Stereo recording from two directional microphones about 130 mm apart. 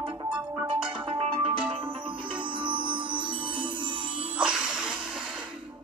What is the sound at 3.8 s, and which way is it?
Music, 40° right (ahead or behind).